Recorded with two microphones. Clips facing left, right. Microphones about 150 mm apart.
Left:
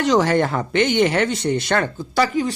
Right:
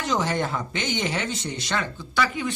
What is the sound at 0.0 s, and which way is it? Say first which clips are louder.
A man's voice: left 8 dB; 75° left (ahead or behind).